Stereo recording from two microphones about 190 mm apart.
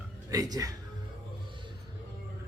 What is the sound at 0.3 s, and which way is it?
Speech, 20° right (ahead or behind).